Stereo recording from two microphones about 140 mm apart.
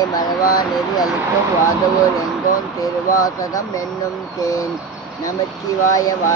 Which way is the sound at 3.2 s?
25° left (ahead or behind).